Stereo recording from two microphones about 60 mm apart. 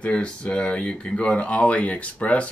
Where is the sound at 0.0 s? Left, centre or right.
Left.